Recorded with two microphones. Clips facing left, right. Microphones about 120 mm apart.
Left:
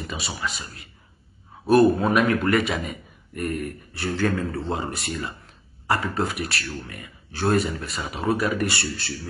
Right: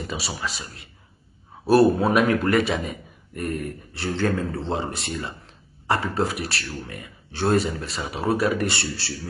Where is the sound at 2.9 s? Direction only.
Centre (ahead or behind).